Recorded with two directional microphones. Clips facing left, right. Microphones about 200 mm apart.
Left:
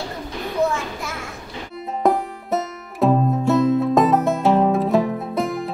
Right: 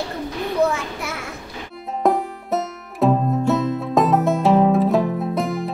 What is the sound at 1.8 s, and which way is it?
Music, centre (ahead or behind).